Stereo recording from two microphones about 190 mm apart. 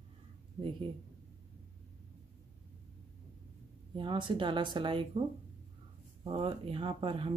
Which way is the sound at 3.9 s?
25° right (ahead or behind).